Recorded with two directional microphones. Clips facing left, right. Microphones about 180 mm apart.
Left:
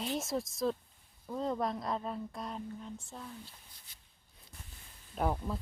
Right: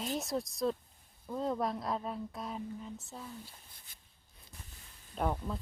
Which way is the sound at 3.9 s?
50° right (ahead or behind).